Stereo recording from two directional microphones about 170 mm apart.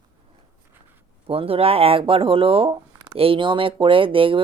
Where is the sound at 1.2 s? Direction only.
35° right (ahead or behind).